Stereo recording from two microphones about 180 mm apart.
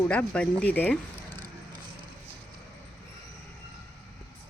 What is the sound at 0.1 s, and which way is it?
Speech, 5° left (ahead or behind).